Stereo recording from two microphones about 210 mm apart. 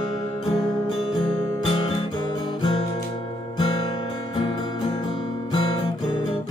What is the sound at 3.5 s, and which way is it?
Music, 25° left (ahead or behind).